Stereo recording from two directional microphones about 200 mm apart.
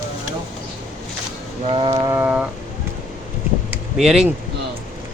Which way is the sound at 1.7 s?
25° right (ahead or behind).